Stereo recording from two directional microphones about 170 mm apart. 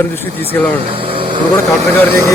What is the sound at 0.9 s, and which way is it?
Speech, 30° right (ahead or behind).